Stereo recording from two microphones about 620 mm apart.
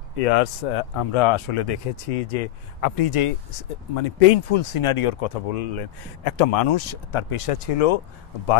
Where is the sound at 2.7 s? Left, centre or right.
Left.